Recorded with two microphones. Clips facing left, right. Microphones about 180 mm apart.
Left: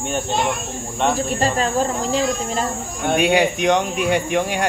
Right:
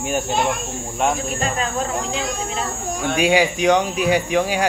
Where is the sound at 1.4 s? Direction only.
35° left (ahead or behind).